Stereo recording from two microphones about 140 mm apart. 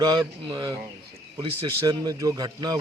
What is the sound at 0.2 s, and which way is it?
Speech, 35° right (ahead or behind).